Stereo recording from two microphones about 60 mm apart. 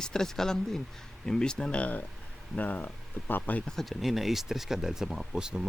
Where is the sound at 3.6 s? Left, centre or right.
Centre.